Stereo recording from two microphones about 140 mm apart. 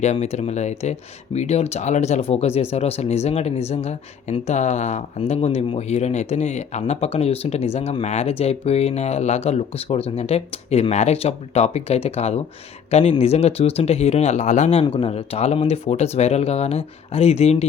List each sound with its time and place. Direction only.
0.0 s speech: 55° left (ahead or behind)
14.9 s speech: 40° left (ahead or behind)